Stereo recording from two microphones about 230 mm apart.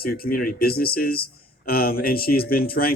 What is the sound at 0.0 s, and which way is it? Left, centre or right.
Speech, left.